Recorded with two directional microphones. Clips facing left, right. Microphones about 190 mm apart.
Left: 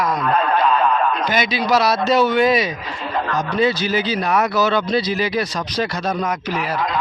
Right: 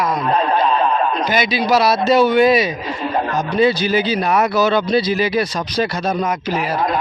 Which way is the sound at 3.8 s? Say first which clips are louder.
Right 3 dB; 55° right (ahead or behind).